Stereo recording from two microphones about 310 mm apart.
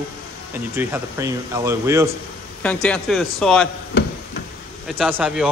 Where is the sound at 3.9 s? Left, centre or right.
Left.